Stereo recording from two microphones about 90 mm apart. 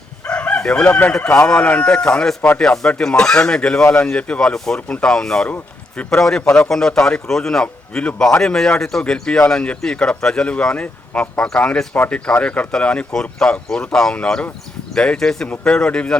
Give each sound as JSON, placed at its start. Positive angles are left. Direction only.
{"t": 0.3, "sound": "chicken", "side_deg": 15}
{"t": 1.1, "sound": "speech", "side_deg": 10}